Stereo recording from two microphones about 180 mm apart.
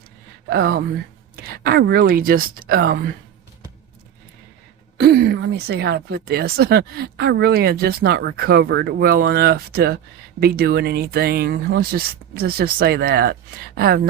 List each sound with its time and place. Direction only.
0.5 s speech: 60° right (ahead or behind)
4.9 s speech: 60° right (ahead or behind)